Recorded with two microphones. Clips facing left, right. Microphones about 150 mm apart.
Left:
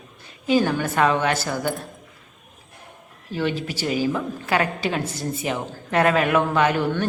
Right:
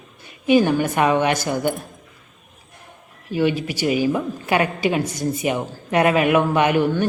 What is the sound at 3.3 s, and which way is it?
A woman's voice, 10° right (ahead or behind).